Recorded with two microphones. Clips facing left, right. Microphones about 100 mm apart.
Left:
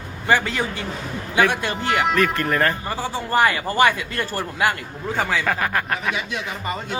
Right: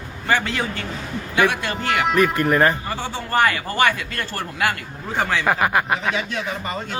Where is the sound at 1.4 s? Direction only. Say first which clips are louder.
Right 1 dB; 10° right (ahead or behind).